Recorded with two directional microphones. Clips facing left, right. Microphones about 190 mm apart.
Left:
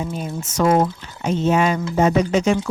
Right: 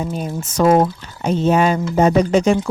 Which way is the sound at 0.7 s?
45° right (ahead or behind).